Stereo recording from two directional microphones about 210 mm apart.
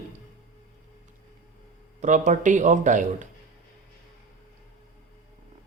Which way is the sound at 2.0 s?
35° right (ahead or behind).